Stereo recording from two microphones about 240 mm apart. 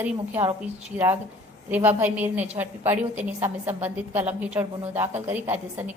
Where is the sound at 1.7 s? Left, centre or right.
Centre.